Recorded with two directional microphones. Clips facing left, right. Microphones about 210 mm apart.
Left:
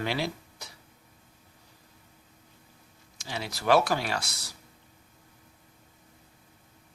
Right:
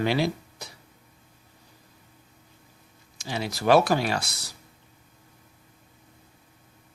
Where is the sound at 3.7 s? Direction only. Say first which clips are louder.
Right 4 dB; 20° right (ahead or behind).